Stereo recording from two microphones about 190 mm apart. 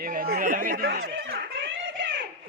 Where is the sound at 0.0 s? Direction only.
50° right (ahead or behind).